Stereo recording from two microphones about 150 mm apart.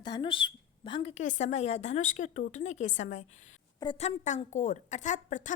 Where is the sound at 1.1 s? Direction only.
55° left (ahead or behind).